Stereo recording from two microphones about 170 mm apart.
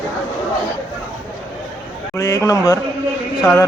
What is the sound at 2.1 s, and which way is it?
Speech, 15° left (ahead or behind).